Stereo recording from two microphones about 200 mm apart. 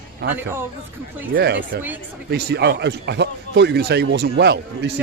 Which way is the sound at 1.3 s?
50° right (ahead or behind).